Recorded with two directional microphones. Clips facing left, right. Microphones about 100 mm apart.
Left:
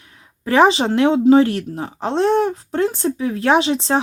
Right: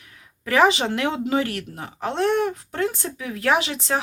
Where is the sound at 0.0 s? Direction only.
30° left (ahead or behind).